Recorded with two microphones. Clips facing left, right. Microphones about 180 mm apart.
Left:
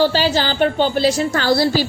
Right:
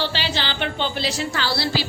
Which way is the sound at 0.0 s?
40° left (ahead or behind).